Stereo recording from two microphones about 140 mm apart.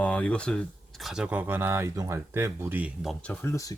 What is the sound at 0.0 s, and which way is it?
Speech, 10° left (ahead or behind).